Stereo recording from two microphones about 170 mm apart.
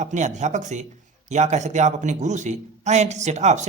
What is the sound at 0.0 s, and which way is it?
A man's voice, 45° right (ahead or behind).